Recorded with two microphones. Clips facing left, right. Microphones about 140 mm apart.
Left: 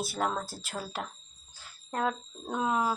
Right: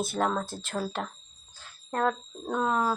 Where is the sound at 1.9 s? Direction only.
10° left (ahead or behind).